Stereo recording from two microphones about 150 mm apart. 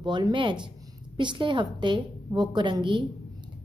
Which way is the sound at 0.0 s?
30° right (ahead or behind).